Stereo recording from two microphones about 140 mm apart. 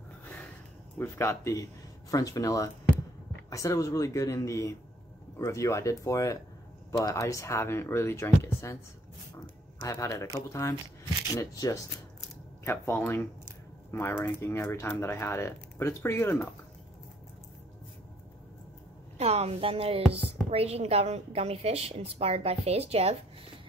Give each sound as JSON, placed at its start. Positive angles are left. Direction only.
{"t": 0.9, "sound": "speech", "side_deg": 15}
{"t": 9.8, "sound": "speech", "side_deg": 25}
{"t": 12.6, "sound": "speech", "side_deg": 15}
{"t": 19.1, "sound": "a woman's voice", "side_deg": -50}